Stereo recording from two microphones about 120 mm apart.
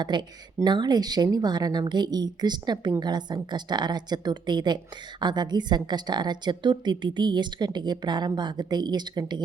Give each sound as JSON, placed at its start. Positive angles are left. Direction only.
{"t": 0.0, "sound": "a woman's voice", "side_deg": -40}